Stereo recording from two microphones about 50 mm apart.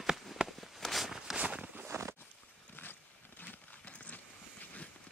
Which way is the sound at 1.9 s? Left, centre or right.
Right.